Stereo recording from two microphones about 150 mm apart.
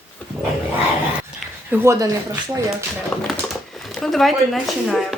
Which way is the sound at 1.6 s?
15° right (ahead or behind).